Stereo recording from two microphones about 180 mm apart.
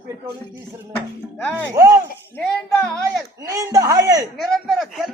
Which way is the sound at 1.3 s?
10° left (ahead or behind).